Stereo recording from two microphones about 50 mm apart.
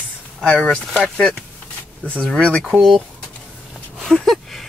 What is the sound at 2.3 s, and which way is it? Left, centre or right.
Speech, centre.